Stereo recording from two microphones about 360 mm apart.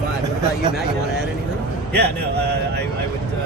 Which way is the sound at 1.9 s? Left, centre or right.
Right.